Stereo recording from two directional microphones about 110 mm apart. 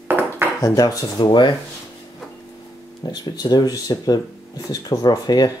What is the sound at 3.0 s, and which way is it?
Speech, 40° left (ahead or behind).